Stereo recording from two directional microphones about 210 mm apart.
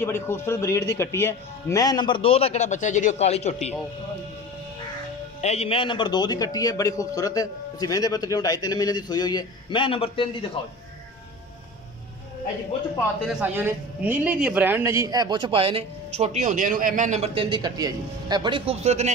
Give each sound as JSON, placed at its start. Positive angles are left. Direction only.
{"t": 0.0, "sound": "a man's voice", "side_deg": 10}
{"t": 5.4, "sound": "a man's voice", "side_deg": 30}
{"t": 13.3, "sound": "a man's voice", "side_deg": -10}